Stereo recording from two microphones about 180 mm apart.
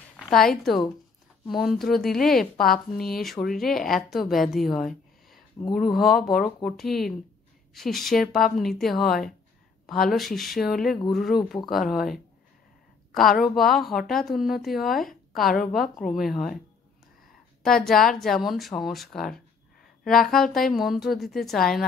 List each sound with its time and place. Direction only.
1.5 s a woman's voice: centre (ahead or behind)
17.6 s a woman's voice: centre (ahead or behind)